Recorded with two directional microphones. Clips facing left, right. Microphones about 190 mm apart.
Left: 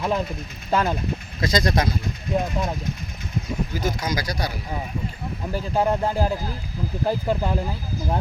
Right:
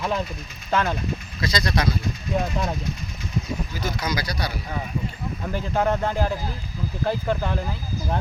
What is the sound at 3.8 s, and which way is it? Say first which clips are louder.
Speech: even; 45° left (ahead or behind).